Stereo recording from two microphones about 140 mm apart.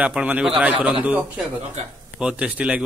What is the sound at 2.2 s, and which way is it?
Speech, 10° right (ahead or behind).